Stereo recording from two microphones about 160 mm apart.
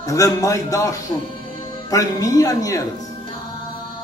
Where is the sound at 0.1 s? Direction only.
20° left (ahead or behind).